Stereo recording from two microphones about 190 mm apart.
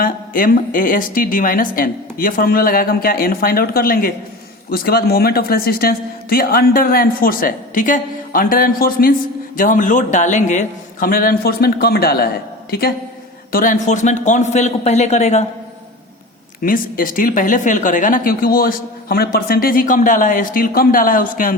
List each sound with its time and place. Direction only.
0.0 s speech: 50° left (ahead or behind)
13.5 s speech: 45° left (ahead or behind)
16.6 s speech: 45° left (ahead or behind)